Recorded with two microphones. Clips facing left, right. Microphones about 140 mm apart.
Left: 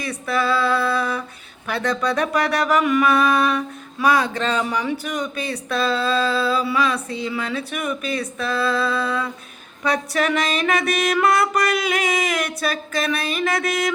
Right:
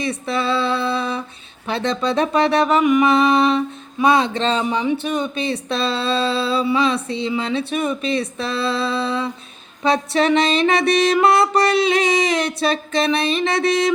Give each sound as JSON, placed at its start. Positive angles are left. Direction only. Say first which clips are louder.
{"t": 0.0, "sound": "speech", "louder": "right 1 dB", "side_deg": -25}